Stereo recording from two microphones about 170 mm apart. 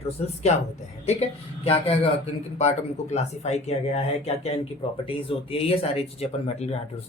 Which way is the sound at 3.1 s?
40° left (ahead or behind).